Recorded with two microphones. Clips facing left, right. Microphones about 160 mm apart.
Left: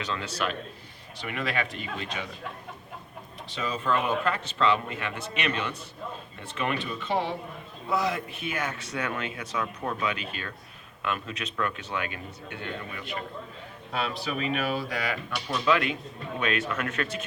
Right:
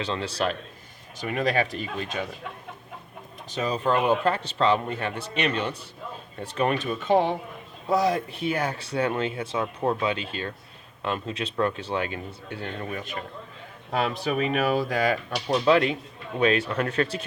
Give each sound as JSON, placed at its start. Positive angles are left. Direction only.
{"t": 0.0, "sound": "speech", "side_deg": -30}
{"t": 3.5, "sound": "speech", "side_deg": -40}
{"t": 7.9, "sound": "speech", "side_deg": -35}